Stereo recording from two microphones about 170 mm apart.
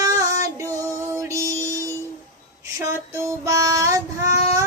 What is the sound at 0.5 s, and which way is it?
Music, 15° right (ahead or behind).